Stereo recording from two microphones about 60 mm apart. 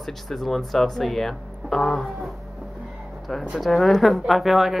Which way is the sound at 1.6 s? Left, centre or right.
Centre.